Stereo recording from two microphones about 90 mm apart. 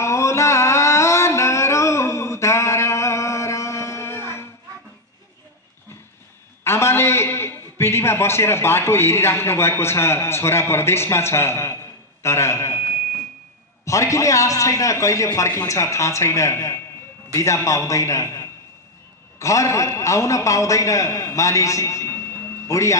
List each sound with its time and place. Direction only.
0.0 s music: 35° left (ahead or behind)
6.6 s a man's voice: 30° left (ahead or behind)